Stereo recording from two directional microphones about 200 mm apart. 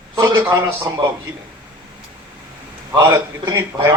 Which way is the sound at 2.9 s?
20° right (ahead or behind).